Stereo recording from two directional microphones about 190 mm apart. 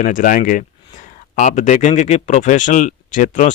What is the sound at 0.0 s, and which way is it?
Speech, 45° left (ahead or behind).